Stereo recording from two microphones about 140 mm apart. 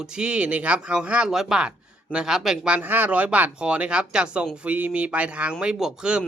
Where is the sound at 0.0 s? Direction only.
5° right (ahead or behind).